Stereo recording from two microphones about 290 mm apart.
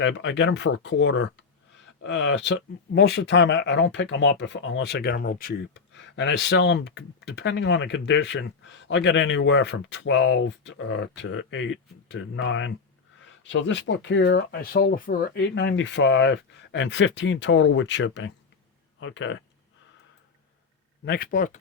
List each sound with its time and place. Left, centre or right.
0.0 s speech: left
21.0 s speech: left